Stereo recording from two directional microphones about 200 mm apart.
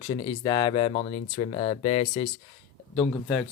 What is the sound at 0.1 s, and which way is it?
Speech, 20° left (ahead or behind).